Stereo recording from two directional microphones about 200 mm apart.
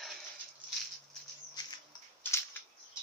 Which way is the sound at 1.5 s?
15° left (ahead or behind).